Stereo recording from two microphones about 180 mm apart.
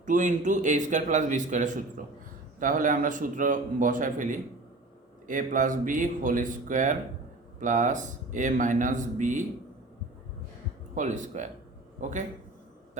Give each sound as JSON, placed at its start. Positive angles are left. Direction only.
{"t": 0.0, "sound": "speech", "side_deg": -45}
{"t": 10.9, "sound": "speech", "side_deg": -45}